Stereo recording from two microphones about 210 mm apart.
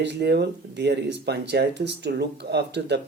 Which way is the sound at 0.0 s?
55° right (ahead or behind).